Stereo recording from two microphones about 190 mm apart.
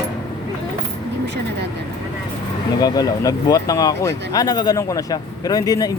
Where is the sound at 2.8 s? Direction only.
20° left (ahead or behind).